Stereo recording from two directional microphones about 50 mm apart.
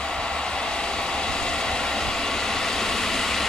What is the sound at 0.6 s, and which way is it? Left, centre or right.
Vehicle, centre.